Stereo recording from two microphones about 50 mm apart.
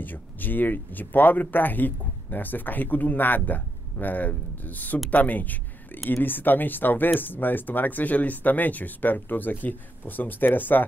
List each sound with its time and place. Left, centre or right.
0.0 s speech: left